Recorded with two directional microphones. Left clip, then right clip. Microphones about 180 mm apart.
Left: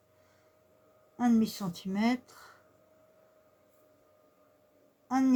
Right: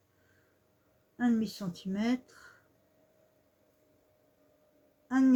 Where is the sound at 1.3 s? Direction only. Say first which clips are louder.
Left 4 dB; 45° left (ahead or behind).